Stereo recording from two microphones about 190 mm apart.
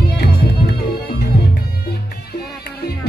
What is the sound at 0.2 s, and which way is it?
Music, 55° left (ahead or behind).